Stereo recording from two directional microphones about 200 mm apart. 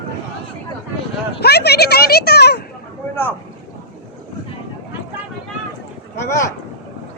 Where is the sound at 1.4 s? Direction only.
55° left (ahead or behind).